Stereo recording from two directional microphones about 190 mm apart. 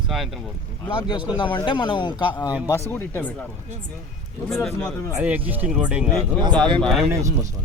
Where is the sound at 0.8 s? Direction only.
25° left (ahead or behind).